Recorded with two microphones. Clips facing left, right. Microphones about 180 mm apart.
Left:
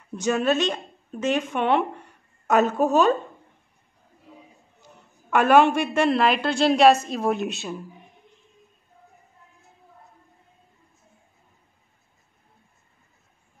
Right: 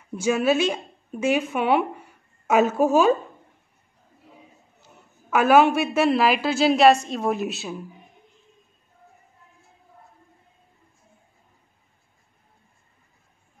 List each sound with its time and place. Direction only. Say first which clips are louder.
0.1 s speech: right 1 dB; 10° right (ahead or behind)
5.3 s a woman's voice: even; 5° right (ahead or behind)